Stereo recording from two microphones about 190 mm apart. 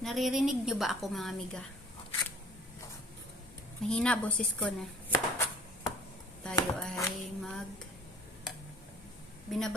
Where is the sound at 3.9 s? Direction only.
5° left (ahead or behind).